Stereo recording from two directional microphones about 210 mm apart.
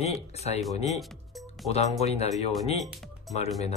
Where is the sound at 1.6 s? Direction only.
30° left (ahead or behind).